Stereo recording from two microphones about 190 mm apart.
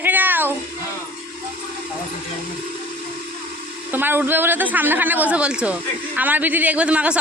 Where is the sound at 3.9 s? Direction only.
10° right (ahead or behind).